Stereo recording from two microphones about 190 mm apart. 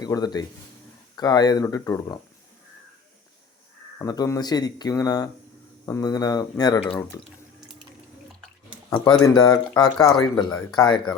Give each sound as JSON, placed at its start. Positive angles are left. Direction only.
{"t": 0.0, "sound": "speech", "side_deg": 20}
{"t": 3.9, "sound": "speech", "side_deg": 20}
{"t": 9.2, "sound": "speech", "side_deg": 20}